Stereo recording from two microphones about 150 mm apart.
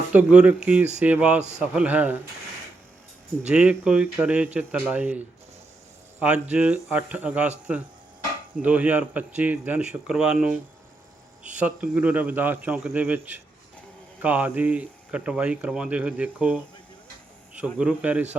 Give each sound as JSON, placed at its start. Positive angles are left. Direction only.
{"t": 0.1, "sound": "speech", "side_deg": -10}
{"t": 1.4, "sound": "a man's voice", "side_deg": -50}
{"t": 1.6, "sound": "speech", "side_deg": -10}
{"t": 3.5, "sound": "speech", "side_deg": -5}
{"t": 8.6, "sound": "speech", "side_deg": -10}
{"t": 11.6, "sound": "speech", "side_deg": -10}
{"t": 17.6, "sound": "speech", "side_deg": -10}